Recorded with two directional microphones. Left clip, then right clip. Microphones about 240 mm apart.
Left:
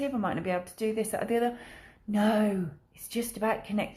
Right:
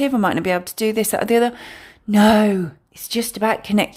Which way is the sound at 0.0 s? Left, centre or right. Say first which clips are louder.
Right 12 dB; right.